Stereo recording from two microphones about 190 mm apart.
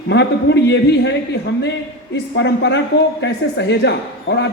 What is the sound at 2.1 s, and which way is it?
A woman's voice, 65° left (ahead or behind).